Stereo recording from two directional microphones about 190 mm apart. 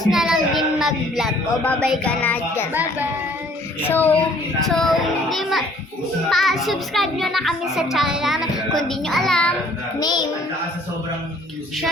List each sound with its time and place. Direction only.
0.1 s child singing: centre (ahead or behind)
3.8 s child singing: 10° left (ahead or behind)
4.7 s a child's voice: centre (ahead or behind)
10.0 s a child's voice: 20° left (ahead or behind)